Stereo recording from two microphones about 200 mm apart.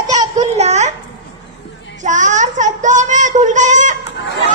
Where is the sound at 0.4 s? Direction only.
35° right (ahead or behind).